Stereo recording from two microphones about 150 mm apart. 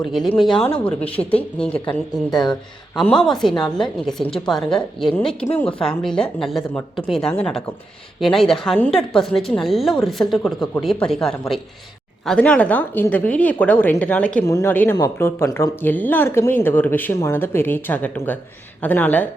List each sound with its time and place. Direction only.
0.1 s speech: centre (ahead or behind)
2.3 s speech: 30° left (ahead or behind)
3.0 s speech: 5° left (ahead or behind)
14.4 s speech: 20° left (ahead or behind)